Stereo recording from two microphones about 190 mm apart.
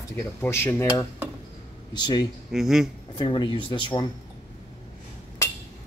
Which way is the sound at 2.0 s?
20° left (ahead or behind).